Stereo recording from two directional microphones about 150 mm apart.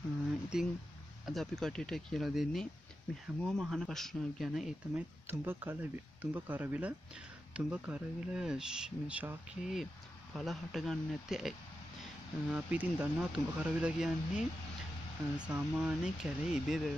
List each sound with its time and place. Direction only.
0.5 s speech: 5° right (ahead or behind)
5.2 s speech: 15° right (ahead or behind)